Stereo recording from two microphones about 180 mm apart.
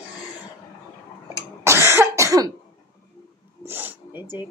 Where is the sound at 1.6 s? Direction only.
15° right (ahead or behind).